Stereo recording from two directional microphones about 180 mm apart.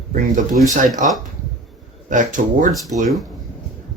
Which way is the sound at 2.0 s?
45° right (ahead or behind).